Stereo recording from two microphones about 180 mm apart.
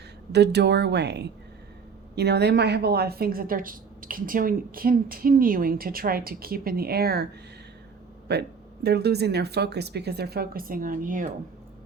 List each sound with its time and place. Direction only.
0.3 s a woman's voice: 65° right (ahead or behind)
8.3 s a woman's voice: 65° right (ahead or behind); by 11.3 s 45° right (ahead or behind)